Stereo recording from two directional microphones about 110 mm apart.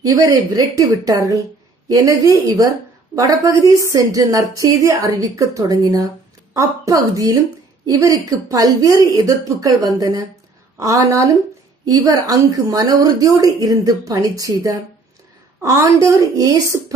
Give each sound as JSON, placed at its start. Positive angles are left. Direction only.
{"t": 0.1, "sound": "a woman's voice", "side_deg": -35}